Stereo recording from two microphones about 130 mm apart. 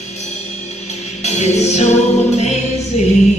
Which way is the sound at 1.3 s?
55° left (ahead or behind).